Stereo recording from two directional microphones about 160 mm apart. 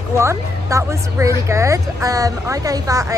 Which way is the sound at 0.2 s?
20° right (ahead or behind).